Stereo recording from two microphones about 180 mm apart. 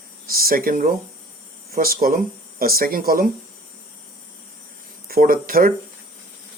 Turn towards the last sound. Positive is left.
turn(degrees=-50)  # may be behind; listen again after turning